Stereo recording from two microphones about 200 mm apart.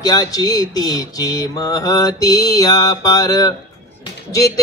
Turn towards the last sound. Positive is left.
turn(degrees=15)  # may be behind; listen again after turning